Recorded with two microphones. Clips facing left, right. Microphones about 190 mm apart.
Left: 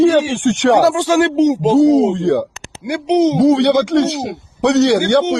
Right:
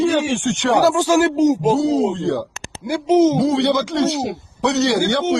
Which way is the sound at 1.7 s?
80° left.